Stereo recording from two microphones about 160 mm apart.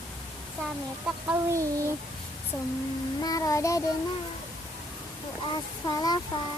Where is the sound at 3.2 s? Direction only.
20° left (ahead or behind).